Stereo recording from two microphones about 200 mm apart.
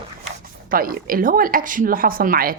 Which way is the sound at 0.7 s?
45° right (ahead or behind).